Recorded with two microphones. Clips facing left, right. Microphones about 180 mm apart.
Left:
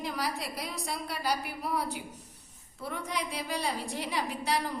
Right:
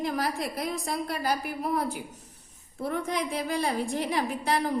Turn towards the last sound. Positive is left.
turn(degrees=-50)  # may be behind; listen again after turning